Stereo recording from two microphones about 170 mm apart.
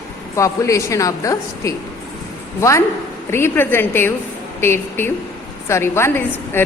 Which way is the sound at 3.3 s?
15° left (ahead or behind).